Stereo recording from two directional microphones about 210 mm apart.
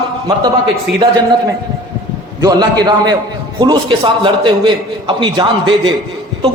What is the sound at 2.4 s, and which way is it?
A man's voice, 20° right (ahead or behind).